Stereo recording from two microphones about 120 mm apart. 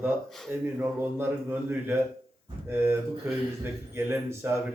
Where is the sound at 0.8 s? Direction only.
20° right (ahead or behind).